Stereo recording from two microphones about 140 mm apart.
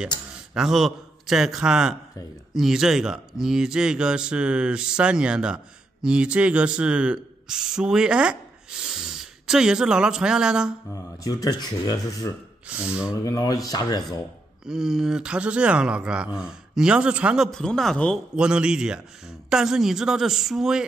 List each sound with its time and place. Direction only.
0.6 s a man's voice: centre (ahead or behind)
10.9 s speech: 25° left (ahead or behind)
12.6 s speech: 10° right (ahead or behind)
13.1 s speech: 25° left (ahead or behind)
14.7 s speech: 5° right (ahead or behind)
17.5 s a man's voice: 5° left (ahead or behind)
18.3 s a man's voice: 5° right (ahead or behind)